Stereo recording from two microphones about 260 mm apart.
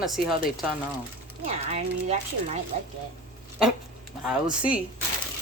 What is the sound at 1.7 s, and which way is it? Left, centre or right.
Speech, right.